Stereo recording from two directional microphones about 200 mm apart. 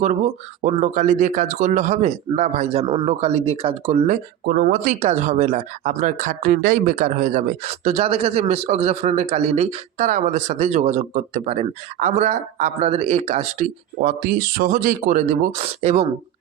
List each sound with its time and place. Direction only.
0.6 s speech: 40° right (ahead or behind)
4.0 s speech: 45° right (ahead or behind)